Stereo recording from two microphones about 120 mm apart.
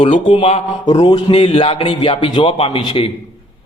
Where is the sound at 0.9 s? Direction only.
40° left (ahead or behind).